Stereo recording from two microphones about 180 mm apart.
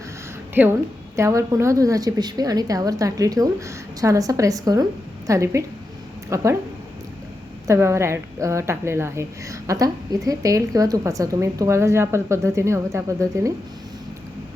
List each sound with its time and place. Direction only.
0.5 s a woman's voice: 10° right (ahead or behind)
7.7 s a woman's voice: 15° right (ahead or behind)